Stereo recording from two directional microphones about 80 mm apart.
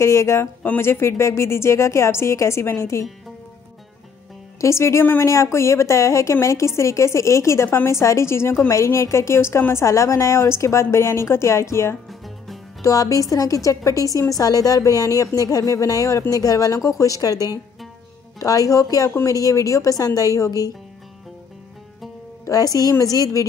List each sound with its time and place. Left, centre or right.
0.0 s a woman's voice: left
4.6 s a woman's voice: left
12.8 s a woman's voice: left
22.8 s a woman's voice: left